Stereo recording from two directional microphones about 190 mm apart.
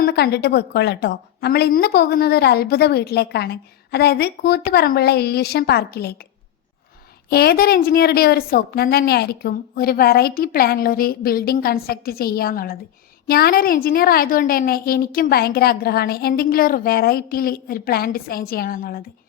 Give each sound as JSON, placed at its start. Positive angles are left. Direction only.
{"t": 0.0, "sound": "a woman's voice", "side_deg": 55}
{"t": 7.3, "sound": "a woman's voice", "side_deg": 55}